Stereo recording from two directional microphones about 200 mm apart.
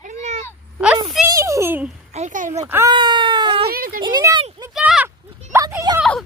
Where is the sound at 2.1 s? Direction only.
40° right (ahead or behind).